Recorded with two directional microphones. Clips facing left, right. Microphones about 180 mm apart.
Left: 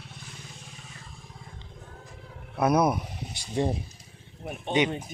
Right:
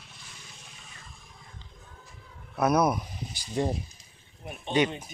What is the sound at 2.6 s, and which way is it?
Speech, 25° left (ahead or behind).